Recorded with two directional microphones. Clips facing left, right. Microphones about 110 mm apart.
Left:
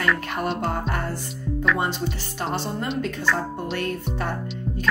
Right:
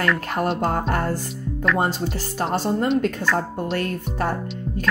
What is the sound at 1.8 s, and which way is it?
A woman's voice, 40° right (ahead or behind).